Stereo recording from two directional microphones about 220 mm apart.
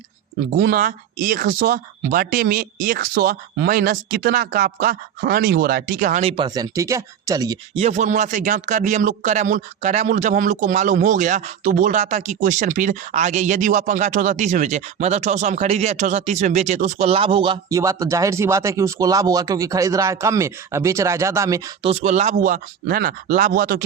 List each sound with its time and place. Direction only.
0.5 s a man's voice: 45° right (ahead or behind); by 7.6 s 15° right (ahead or behind)
7.8 s a man's voice: 30° right (ahead or behind); by 21.6 s 15° right (ahead or behind)
21.8 s a man's voice: 30° right (ahead or behind)